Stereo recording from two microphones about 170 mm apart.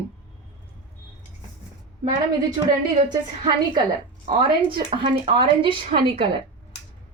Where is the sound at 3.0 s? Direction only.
25° right (ahead or behind).